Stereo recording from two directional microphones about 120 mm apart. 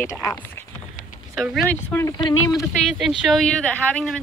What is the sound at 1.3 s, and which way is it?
Speech, centre (ahead or behind).